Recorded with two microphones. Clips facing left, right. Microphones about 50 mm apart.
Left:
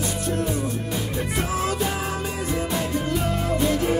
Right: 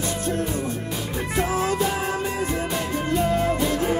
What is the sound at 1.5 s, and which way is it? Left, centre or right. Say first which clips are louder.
Music: right 1 dB; right.